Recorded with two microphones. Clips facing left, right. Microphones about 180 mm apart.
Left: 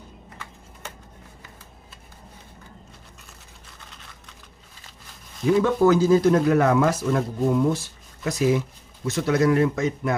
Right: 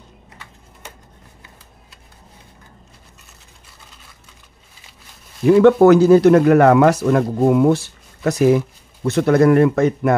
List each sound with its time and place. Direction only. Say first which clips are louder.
5.4 s a man's voice: right 8 dB; 65° right (ahead or behind)